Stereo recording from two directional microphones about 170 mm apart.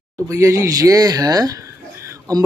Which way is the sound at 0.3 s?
20° right (ahead or behind).